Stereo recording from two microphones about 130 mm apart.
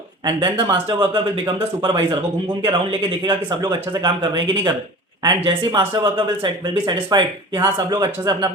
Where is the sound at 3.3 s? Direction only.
35° right (ahead or behind).